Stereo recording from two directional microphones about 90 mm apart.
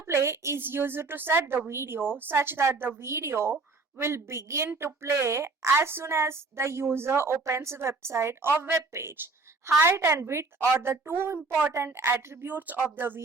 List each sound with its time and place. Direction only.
0.0 s a woman's voice: 30° right (ahead or behind)